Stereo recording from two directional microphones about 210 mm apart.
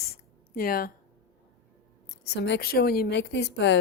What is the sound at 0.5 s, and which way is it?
Speech, 45° left (ahead or behind).